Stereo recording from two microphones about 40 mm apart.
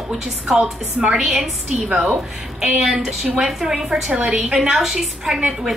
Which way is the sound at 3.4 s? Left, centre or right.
Centre.